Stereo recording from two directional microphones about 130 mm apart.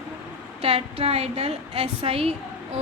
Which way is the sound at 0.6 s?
50° right (ahead or behind).